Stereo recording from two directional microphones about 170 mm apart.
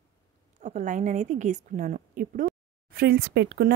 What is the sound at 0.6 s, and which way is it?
A woman's voice, 45° right (ahead or behind).